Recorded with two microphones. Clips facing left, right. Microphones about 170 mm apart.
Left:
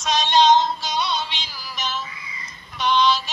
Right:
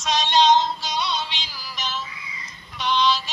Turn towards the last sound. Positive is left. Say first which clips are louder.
# left 2 dB
turn(degrees=50)  # may be behind; listen again after turning